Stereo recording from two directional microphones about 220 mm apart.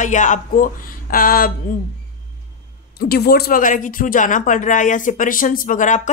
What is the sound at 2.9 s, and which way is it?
Speech, 45° left (ahead or behind).